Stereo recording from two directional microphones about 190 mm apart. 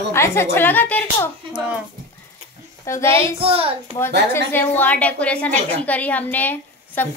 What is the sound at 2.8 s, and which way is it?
Speech, 15° left (ahead or behind).